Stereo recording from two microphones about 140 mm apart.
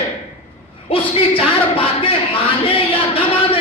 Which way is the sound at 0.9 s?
40° left (ahead or behind).